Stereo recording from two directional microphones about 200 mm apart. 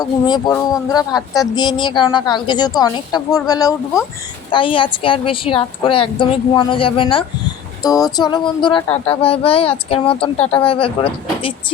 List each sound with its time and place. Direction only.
0.0 s speech: 20° left (ahead or behind)